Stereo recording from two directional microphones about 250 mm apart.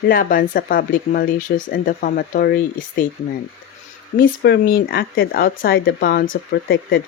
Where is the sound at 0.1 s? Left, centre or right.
Left.